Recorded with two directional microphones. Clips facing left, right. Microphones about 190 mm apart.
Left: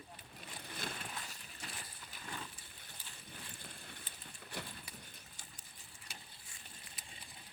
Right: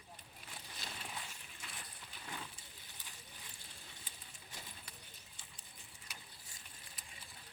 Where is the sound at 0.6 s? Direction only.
55° left (ahead or behind).